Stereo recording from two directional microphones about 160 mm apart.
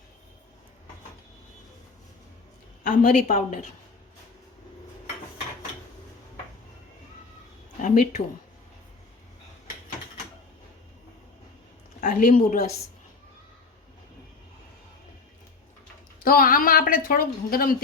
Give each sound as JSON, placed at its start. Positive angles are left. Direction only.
{"t": 2.8, "sound": "a woman's voice", "side_deg": 55}
{"t": 7.8, "sound": "speech", "side_deg": 50}
{"t": 11.9, "sound": "a woman's voice", "side_deg": 55}
{"t": 16.2, "sound": "a woman's voice", "side_deg": 60}